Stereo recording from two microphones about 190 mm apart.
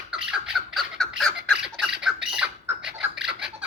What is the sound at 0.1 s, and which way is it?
Squawk, 5° right (ahead or behind).